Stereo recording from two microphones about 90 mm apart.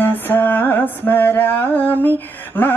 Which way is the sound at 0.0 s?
20° left (ahead or behind).